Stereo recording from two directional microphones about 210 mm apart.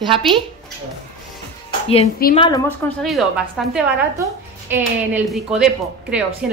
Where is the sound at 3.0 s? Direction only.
Centre (ahead or behind).